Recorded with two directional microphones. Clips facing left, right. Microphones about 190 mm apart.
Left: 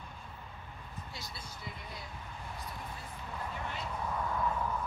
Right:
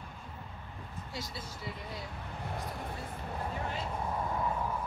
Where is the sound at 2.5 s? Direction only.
50° right (ahead or behind).